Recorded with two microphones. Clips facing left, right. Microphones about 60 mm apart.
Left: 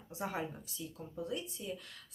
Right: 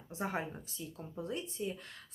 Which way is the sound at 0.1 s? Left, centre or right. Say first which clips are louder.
Right 1 dB; right.